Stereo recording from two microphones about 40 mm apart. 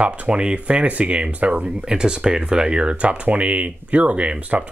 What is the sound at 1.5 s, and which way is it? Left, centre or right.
Speech, right.